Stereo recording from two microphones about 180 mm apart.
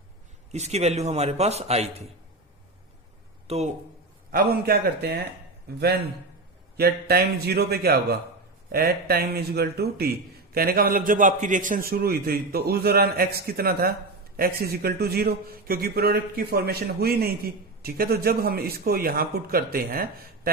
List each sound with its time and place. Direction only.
0.5 s a man's voice: 40° right (ahead or behind)
3.4 s speech: 35° right (ahead or behind)
4.3 s speech: 55° right (ahead or behind)
6.7 s speech: 60° right (ahead or behind)